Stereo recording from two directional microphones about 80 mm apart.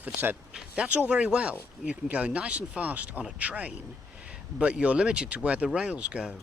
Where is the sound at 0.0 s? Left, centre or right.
Right.